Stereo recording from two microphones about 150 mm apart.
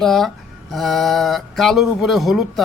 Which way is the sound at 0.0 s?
Centre (ahead or behind).